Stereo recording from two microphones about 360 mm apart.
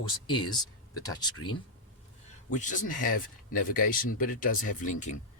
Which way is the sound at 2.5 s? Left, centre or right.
Left.